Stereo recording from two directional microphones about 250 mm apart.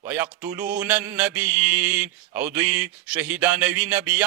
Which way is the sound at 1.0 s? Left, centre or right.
Centre.